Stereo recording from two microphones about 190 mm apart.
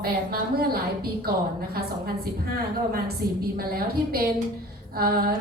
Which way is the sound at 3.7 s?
50° right (ahead or behind).